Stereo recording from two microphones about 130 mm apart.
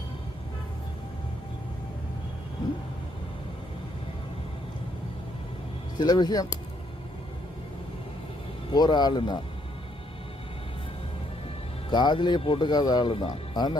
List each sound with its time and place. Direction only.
6.0 s speech: 35° left (ahead or behind)
8.7 s speech: 35° left (ahead or behind)
11.9 s speech: 35° left (ahead or behind)
13.5 s speech: 35° left (ahead or behind)